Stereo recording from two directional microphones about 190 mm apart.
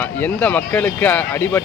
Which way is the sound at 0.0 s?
10° left (ahead or behind).